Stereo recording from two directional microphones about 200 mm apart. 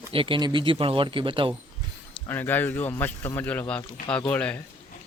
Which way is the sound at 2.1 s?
10° left (ahead or behind).